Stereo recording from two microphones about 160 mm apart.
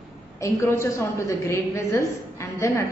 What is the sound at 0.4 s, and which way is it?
A woman's voice, 15° left (ahead or behind).